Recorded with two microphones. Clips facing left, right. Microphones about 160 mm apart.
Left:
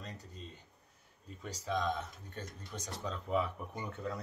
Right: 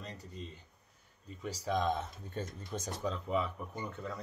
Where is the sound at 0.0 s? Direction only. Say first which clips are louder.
Right 2 dB; centre (ahead or behind).